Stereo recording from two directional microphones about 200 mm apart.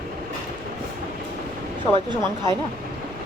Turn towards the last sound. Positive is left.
turn(degrees=-25)  # may be behind; listen again after turning